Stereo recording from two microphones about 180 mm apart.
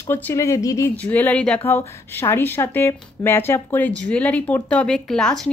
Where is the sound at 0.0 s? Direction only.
15° left (ahead or behind).